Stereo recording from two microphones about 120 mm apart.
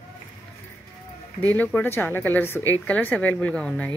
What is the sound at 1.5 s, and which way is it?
A woman's voice, 15° left (ahead or behind).